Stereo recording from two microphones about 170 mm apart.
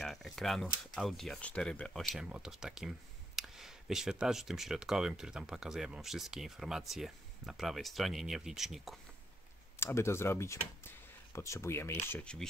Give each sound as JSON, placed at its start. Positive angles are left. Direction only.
{"t": 0.0, "sound": "speech", "side_deg": 0}
{"t": 9.8, "sound": "speech", "side_deg": 15}